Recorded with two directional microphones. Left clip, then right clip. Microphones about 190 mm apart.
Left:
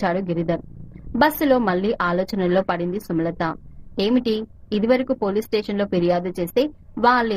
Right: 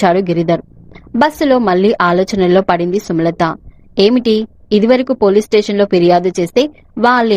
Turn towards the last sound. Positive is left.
turn(degrees=-35)  # may be behind; listen again after turning